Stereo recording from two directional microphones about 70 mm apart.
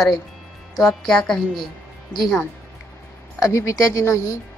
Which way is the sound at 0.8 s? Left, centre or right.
Centre.